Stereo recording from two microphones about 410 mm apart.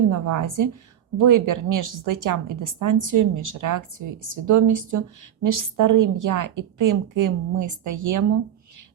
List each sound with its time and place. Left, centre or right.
0.1 s a woman's voice: right